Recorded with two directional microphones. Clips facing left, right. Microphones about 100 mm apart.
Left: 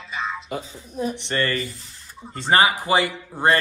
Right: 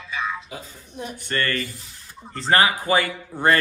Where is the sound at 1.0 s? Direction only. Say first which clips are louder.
Left 3 dB; 25° left (ahead or behind).